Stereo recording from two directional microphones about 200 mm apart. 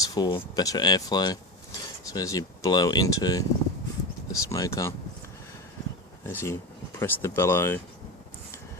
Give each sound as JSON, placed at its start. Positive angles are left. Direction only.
{"t": 0.0, "sound": "speech", "side_deg": 20}
{"t": 6.2, "sound": "speech", "side_deg": 10}